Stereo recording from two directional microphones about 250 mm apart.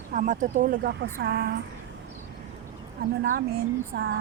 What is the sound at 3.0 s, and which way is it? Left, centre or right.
Speech, right.